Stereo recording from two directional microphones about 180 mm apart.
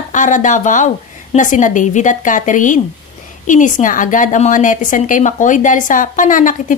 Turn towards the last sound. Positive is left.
turn(degrees=45)  # may be behind; listen again after turning